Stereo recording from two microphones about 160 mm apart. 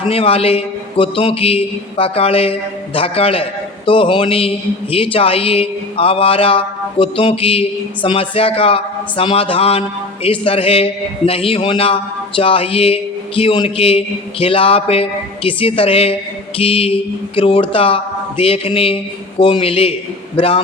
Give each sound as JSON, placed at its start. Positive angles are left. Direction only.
{"t": 0.0, "sound": "a man's voice", "side_deg": 35}